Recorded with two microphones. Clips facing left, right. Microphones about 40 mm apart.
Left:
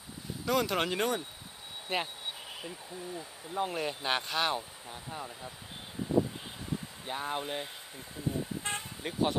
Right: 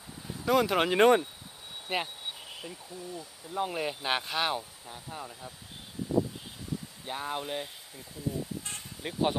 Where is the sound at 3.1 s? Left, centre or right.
Centre.